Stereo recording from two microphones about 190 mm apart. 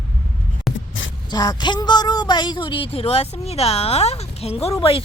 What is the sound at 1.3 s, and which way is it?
Speech, 20° left (ahead or behind).